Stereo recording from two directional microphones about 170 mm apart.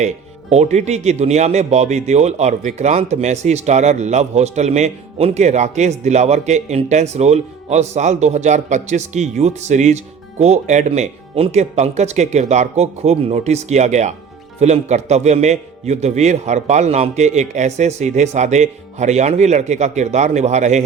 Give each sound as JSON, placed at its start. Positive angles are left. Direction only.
{"t": 0.5, "sound": "speech", "side_deg": -40}